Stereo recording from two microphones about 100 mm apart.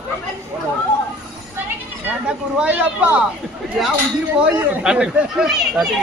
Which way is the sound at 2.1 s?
15° right (ahead or behind).